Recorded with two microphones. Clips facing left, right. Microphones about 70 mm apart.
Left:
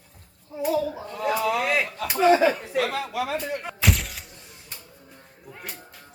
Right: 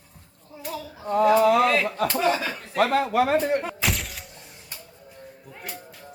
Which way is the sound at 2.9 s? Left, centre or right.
Right.